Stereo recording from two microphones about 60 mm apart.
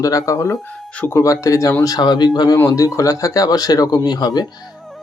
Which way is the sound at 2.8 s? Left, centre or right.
Left.